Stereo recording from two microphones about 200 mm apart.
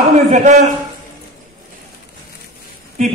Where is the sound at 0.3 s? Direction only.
35° right (ahead or behind).